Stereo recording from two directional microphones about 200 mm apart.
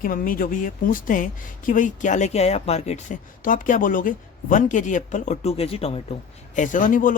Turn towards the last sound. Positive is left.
turn(degrees=40)  # may be behind; listen again after turning